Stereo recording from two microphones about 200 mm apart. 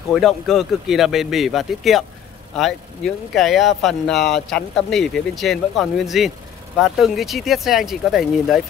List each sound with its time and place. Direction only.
0.1 s speech: centre (ahead or behind)